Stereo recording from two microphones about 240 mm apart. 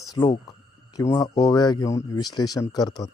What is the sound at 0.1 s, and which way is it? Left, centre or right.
Speech, centre.